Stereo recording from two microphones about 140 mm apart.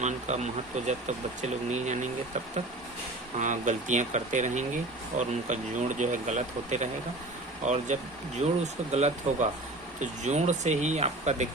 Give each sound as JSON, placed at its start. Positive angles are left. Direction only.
{"t": 0.0, "sound": "speech", "side_deg": -55}
{"t": 3.4, "sound": "speech", "side_deg": -60}